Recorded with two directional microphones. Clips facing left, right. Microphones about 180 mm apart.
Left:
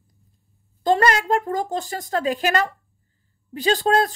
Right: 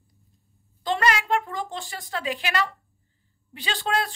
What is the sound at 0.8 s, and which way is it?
Speech, 45° left (ahead or behind).